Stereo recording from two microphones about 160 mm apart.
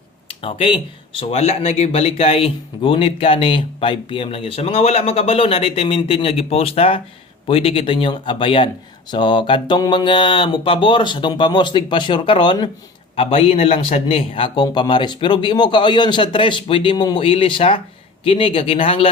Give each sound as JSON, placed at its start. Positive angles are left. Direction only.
{"t": 0.3, "sound": "speech", "side_deg": 35}